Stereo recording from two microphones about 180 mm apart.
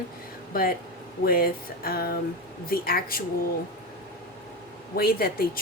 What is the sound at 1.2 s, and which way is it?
Speech, 55° left (ahead or behind).